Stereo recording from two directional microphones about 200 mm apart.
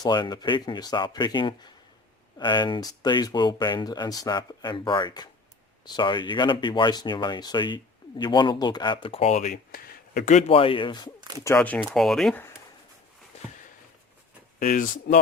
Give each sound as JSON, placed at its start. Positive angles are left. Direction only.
{"t": 0.0, "sound": "speech", "side_deg": 20}
{"t": 9.5, "sound": "speech", "side_deg": 50}
{"t": 11.4, "sound": "speech", "side_deg": 10}
{"t": 14.6, "sound": "speech", "side_deg": 40}